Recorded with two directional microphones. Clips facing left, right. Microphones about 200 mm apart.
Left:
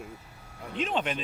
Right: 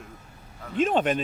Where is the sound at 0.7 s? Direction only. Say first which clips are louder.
Right 7 dB; 50° right (ahead or behind).